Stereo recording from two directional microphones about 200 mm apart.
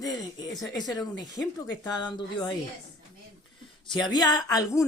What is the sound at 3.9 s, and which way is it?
Speech, 20° left (ahead or behind).